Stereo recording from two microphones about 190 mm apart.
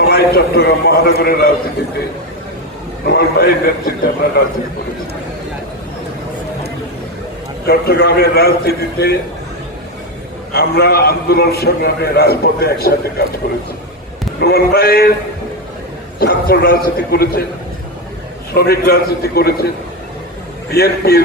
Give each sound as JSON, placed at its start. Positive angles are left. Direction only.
{"t": 0.1, "sound": "a man's voice", "side_deg": 55}
{"t": 3.1, "sound": "a man's voice", "side_deg": 55}
{"t": 7.7, "sound": "a man's voice", "side_deg": 55}
{"t": 10.5, "sound": "a man's voice", "side_deg": 55}
{"t": 14.4, "sound": "a man's voice", "side_deg": 55}
{"t": 16.2, "sound": "a man's voice", "side_deg": 55}
{"t": 18.5, "sound": "a man's voice", "side_deg": 55}
{"t": 20.7, "sound": "a man's voice", "side_deg": 55}